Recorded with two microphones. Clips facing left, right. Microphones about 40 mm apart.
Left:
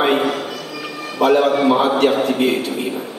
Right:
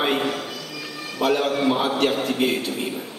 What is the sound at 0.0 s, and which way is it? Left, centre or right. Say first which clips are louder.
Music: left 6 dB; centre.